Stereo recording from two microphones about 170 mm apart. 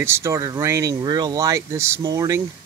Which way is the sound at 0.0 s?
15° right (ahead or behind).